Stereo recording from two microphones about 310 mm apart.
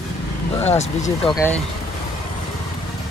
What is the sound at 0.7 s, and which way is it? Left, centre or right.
Speech, left.